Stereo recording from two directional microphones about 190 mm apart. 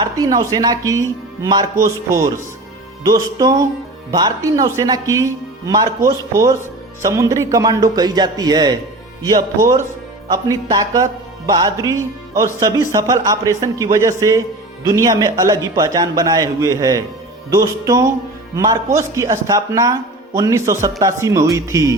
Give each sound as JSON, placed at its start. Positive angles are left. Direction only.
{"t": 0.0, "sound": "speech", "side_deg": -20}